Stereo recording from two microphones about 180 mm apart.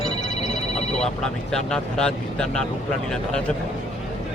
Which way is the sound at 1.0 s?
5° left (ahead or behind).